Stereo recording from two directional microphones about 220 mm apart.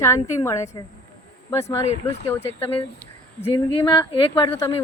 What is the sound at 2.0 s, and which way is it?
Speech, 10° left (ahead or behind).